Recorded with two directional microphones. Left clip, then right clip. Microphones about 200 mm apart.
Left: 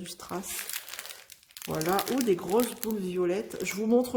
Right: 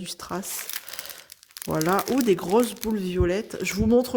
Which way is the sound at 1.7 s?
50° right (ahead or behind).